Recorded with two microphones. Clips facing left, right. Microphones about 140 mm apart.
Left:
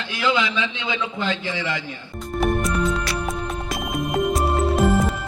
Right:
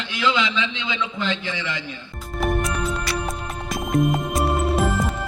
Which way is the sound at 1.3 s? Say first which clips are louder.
Left 1 dB; 20° right (ahead or behind).